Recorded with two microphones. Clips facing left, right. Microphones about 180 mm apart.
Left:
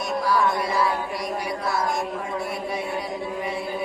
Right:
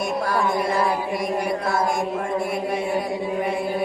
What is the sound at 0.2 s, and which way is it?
Music, 50° right (ahead or behind).